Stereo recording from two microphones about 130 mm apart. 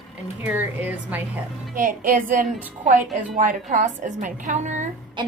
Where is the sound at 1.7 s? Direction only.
90° right.